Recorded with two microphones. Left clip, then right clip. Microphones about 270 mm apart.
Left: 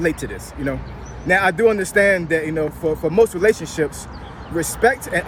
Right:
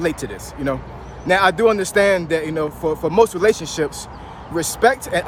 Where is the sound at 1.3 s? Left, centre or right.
Centre.